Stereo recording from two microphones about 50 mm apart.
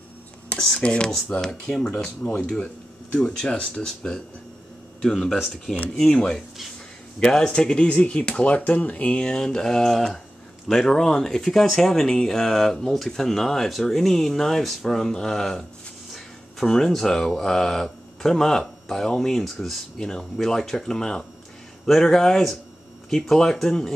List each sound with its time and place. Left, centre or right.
0.6 s speech: centre